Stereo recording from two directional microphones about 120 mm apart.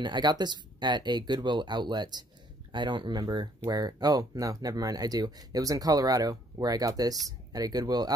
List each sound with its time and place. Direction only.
0.0 s speech: 40° right (ahead or behind)